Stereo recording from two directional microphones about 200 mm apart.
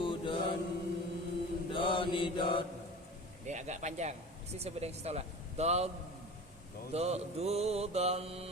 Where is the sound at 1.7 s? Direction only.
25° left (ahead or behind).